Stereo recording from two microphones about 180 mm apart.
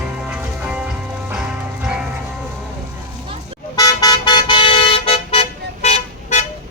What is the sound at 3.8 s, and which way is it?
Car, 20° left (ahead or behind).